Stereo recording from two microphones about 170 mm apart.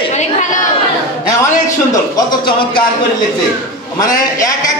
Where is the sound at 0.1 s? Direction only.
45° left (ahead or behind).